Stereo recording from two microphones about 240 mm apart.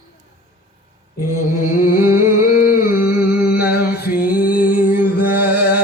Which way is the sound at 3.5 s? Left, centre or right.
Left.